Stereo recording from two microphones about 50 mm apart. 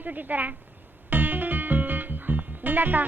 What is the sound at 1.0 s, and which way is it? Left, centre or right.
Music, right.